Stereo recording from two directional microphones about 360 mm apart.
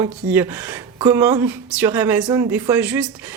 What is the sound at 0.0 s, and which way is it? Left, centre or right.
Speech, centre.